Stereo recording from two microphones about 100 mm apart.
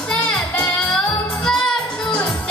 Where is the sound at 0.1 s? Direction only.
10° left (ahead or behind).